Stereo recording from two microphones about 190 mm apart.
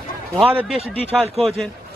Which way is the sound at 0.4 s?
Centre (ahead or behind).